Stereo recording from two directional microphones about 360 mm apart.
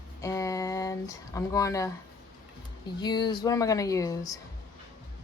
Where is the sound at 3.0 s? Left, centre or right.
Centre.